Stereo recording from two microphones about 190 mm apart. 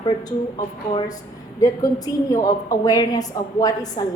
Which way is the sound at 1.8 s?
20° left (ahead or behind).